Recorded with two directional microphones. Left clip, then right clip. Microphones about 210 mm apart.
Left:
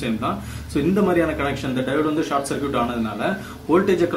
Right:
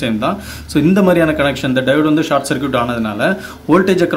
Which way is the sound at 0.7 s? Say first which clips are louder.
Right 7 dB; 45° right (ahead or behind).